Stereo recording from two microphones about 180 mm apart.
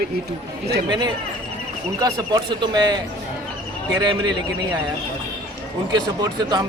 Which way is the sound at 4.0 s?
25° right (ahead or behind).